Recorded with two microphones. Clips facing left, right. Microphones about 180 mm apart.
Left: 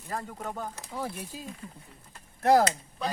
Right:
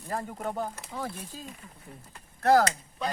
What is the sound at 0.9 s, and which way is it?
Speech, 10° left (ahead or behind).